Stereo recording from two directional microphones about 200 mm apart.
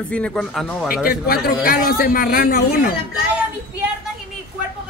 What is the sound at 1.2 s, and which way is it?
Speech, 50° left (ahead or behind).